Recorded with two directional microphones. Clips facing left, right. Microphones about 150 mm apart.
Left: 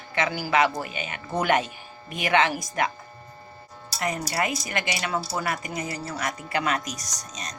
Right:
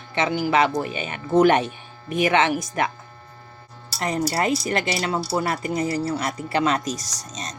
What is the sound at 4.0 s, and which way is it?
Speech, 30° right (ahead or behind).